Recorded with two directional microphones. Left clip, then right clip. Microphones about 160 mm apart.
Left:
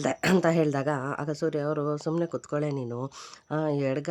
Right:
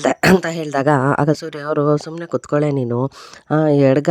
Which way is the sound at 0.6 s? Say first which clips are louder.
Right 11 dB; 70° right (ahead or behind).